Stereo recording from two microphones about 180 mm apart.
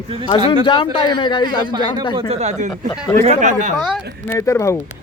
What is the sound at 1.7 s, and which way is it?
Speech, 25° right (ahead or behind).